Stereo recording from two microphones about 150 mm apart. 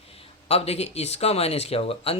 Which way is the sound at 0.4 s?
45° left (ahead or behind).